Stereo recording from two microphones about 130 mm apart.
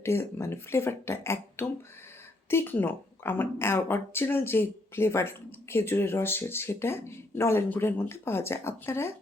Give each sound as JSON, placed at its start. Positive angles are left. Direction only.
{"t": 0.0, "sound": "a woman's voice", "side_deg": 20}